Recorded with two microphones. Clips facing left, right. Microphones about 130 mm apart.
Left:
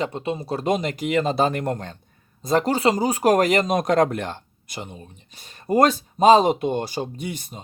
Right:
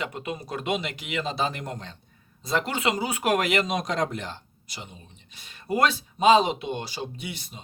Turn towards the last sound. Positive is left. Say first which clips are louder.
# left 6 dB
turn(degrees=45)  # may be behind; listen again after turning